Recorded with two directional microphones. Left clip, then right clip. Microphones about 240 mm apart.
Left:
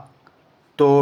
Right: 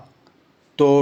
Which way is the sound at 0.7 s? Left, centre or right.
Right.